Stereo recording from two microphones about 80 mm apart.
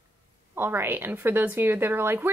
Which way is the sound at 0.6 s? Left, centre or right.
Right.